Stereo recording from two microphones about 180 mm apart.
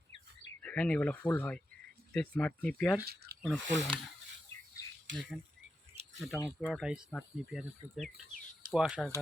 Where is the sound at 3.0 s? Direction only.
60° right (ahead or behind).